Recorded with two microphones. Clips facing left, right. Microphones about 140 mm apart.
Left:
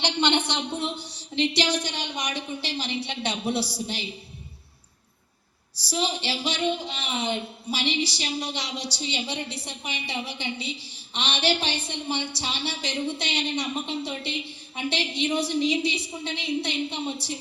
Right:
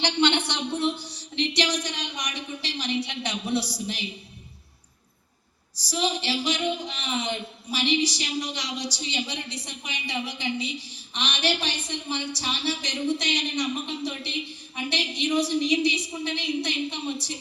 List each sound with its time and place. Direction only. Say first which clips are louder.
0.0 s speech: right 1 dB; 20° left (ahead or behind)
5.7 s speech: right 1 dB; 30° left (ahead or behind)